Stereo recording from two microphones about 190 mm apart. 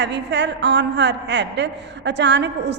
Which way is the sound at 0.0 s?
65° right (ahead or behind).